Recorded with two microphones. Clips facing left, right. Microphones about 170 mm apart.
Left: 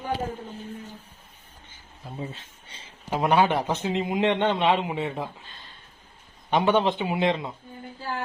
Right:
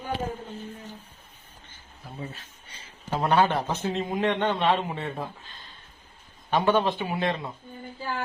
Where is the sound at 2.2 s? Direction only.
25° left (ahead or behind).